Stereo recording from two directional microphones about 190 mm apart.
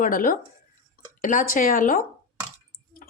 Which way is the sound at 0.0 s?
45° left (ahead or behind).